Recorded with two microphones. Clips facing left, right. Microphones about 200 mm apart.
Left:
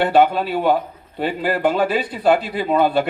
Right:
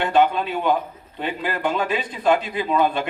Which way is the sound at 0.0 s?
35° left (ahead or behind).